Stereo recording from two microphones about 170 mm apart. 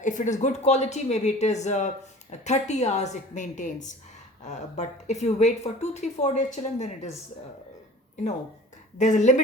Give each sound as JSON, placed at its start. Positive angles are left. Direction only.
{"t": 0.0, "sound": "speech", "side_deg": 45}
{"t": 9.0, "sound": "speech", "side_deg": 45}